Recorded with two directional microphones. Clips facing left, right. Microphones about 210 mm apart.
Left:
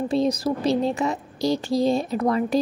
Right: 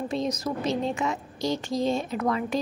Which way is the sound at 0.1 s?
35° left (ahead or behind).